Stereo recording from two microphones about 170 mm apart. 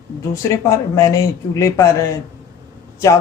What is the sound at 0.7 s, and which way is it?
A woman's voice, 15° left (ahead or behind).